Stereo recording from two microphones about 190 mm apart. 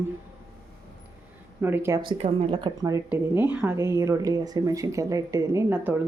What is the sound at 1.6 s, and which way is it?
Speech, 10° right (ahead or behind).